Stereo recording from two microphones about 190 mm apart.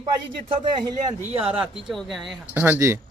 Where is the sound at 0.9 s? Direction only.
25° right (ahead or behind).